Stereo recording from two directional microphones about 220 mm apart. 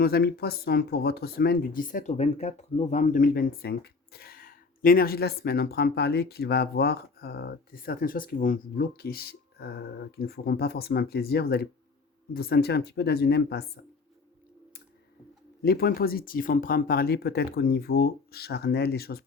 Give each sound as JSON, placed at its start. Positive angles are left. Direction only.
{"t": 0.0, "sound": "speech", "side_deg": 45}
{"t": 15.6, "sound": "speech", "side_deg": 45}